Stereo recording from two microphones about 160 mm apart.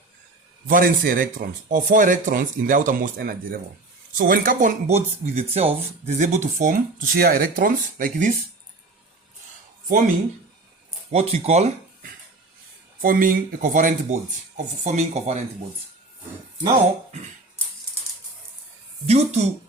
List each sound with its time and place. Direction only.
0.7 s speech: 60° right (ahead or behind)
4.9 s speech: 40° right (ahead or behind)
11.1 s speech: 40° right (ahead or behind)
13.0 s speech: 60° right (ahead or behind); by 15.4 s 45° right (ahead or behind)
19.0 s speech: 40° right (ahead or behind)